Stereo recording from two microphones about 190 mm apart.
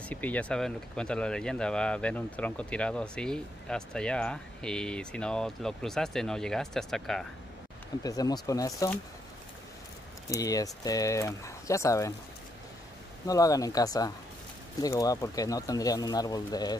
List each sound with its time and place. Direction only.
0.0 s speech: 10° left (ahead or behind)
8.0 s speech: 20° left (ahead or behind)
10.3 s speech: 20° left (ahead or behind)
13.3 s speech: 20° left (ahead or behind)